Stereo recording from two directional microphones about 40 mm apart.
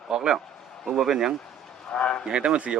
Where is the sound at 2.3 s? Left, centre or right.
Right.